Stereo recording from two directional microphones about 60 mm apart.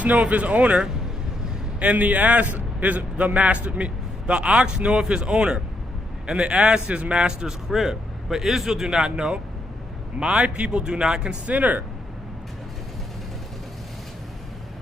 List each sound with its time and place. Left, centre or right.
0.2 s a man's voice: right